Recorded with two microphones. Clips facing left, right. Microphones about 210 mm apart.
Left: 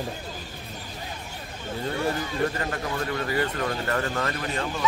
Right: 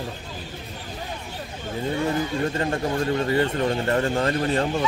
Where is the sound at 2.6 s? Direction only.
30° right (ahead or behind).